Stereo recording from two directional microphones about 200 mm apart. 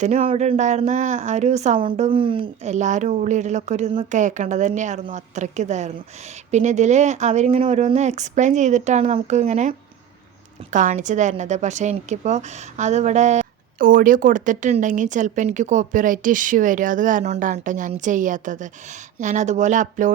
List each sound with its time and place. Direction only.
0.0 s a woman's voice: 35° right (ahead or behind)